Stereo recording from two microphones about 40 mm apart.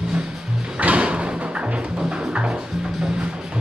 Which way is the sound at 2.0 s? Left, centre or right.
Right.